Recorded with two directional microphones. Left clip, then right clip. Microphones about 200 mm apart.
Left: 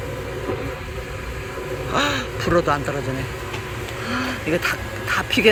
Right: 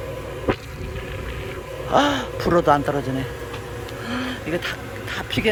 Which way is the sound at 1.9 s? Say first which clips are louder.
Right 3 dB; 20° right (ahead or behind).